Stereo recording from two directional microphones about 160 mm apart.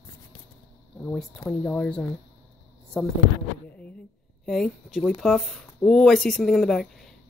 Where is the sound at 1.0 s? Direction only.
10° left (ahead or behind).